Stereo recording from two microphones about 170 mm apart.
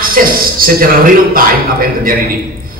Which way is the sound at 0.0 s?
55° right (ahead or behind).